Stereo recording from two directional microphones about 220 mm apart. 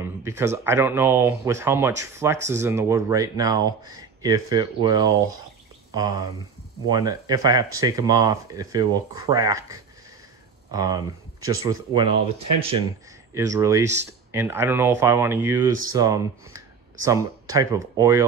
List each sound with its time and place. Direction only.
0.0 s speech: 10° right (ahead or behind)
13.3 s speech: 15° right (ahead or behind)